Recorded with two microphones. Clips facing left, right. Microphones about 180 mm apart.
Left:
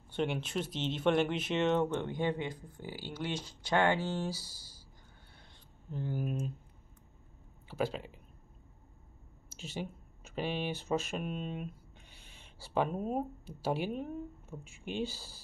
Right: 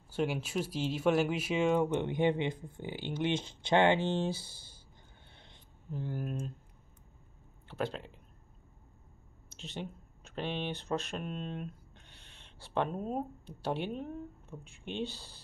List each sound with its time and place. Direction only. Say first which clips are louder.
0.1 s speech: right 1 dB; 5° right (ahead or behind); by 4.7 s 25° right (ahead or behind)
5.3 s a sound: right 2 dB; 25° right (ahead or behind)
5.9 s speech: left 1 dB; centre (ahead or behind)
7.6 s speech: left 2 dB; 5° left (ahead or behind)
9.5 s speech: left 1 dB; 5° left (ahead or behind)